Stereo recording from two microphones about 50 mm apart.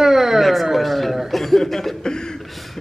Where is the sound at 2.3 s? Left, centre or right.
Centre.